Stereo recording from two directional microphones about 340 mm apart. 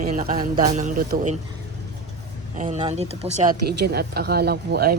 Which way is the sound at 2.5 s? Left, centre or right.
Right.